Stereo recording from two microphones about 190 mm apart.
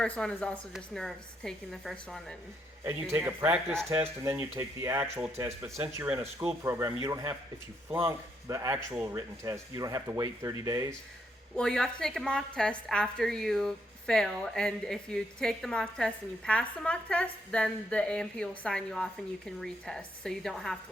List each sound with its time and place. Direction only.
0.0 s speech: 5° left (ahead or behind)
2.8 s a man's voice: 10° right (ahead or behind)
11.5 s speech: 5° left (ahead or behind)